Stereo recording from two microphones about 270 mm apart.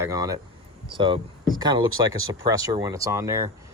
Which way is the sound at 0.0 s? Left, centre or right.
Centre.